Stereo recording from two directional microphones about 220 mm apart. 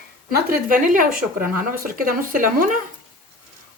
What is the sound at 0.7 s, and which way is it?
Speech, 40° right (ahead or behind).